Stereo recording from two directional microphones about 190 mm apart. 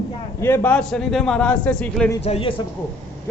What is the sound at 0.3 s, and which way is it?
A man's voice, 10° left (ahead or behind).